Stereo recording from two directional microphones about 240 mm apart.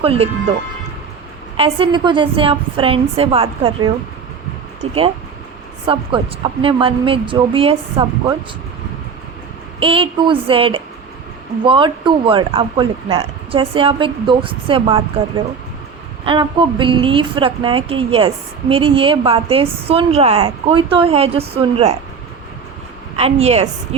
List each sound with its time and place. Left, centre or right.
0.0 s speech: right
1.5 s speech: right
9.8 s speech: right
16.2 s speech: centre
23.1 s speech: right